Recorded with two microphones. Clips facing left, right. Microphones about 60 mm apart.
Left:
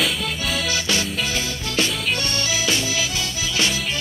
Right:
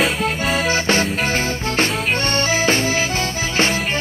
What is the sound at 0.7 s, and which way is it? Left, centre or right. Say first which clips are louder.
Music: right 6 dB; right.